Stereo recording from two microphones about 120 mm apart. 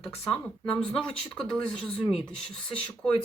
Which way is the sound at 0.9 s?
5° left (ahead or behind).